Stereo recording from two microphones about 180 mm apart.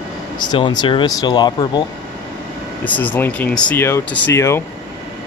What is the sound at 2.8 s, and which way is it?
Speech, 10° left (ahead or behind).